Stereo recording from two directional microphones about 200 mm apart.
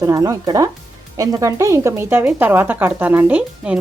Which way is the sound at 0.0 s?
15° right (ahead or behind).